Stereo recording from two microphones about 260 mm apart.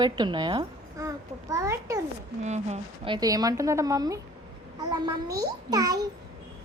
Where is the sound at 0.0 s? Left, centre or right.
Centre.